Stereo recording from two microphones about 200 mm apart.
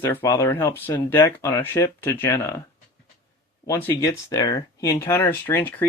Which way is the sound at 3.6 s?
15° left (ahead or behind).